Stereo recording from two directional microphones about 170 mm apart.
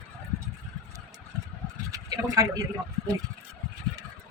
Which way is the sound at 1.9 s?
20° right (ahead or behind).